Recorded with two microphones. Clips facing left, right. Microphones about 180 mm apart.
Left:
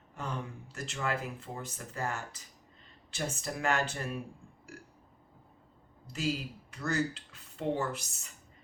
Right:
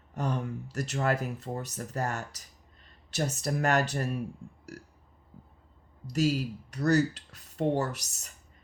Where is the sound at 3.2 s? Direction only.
40° right (ahead or behind).